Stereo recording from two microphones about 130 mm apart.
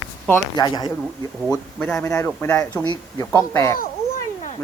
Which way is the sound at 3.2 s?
20° left (ahead or behind).